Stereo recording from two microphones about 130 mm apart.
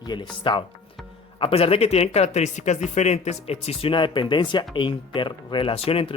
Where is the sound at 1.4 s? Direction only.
50° left (ahead or behind).